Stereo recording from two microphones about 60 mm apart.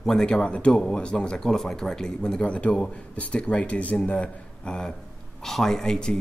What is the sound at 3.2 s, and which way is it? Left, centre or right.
Speech, left.